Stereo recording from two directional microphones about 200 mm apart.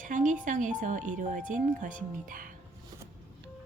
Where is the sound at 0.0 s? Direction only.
40° right (ahead or behind).